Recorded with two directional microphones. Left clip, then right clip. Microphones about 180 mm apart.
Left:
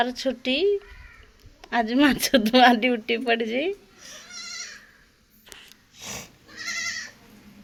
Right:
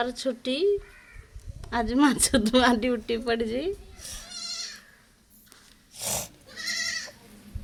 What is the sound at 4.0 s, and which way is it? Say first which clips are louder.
Goat: right 1 dB; 70° right (ahead or behind).